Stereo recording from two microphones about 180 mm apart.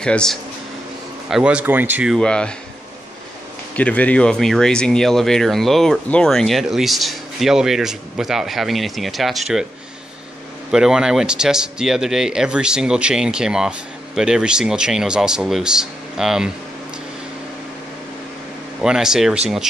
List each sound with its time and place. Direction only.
0.0 s speech: 5° left (ahead or behind)
1.3 s speech: 5° right (ahead or behind)
2.1 s speech: 5° left (ahead or behind)
3.7 s speech: 10° left (ahead or behind)
10.7 s speech: 5° right (ahead or behind)
18.8 s speech: 5° right (ahead or behind)